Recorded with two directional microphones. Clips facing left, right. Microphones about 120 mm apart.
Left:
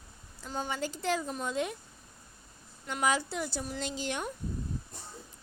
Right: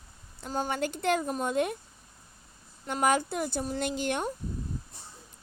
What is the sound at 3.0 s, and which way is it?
A woman's voice, 50° right (ahead or behind).